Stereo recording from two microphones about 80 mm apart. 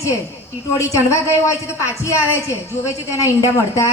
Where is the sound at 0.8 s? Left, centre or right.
Left.